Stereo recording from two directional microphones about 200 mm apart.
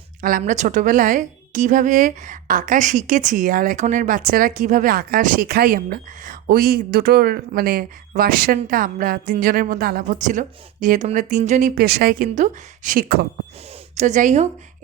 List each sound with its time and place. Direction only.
0.2 s a woman's voice: 45° right (ahead or behind)